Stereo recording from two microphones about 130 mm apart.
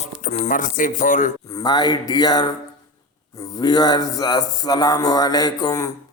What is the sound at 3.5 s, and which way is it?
Speech, 30° left (ahead or behind).